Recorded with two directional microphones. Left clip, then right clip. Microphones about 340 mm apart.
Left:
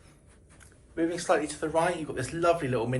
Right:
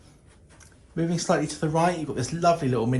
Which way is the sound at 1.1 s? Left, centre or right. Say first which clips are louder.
Right 3 dB; centre.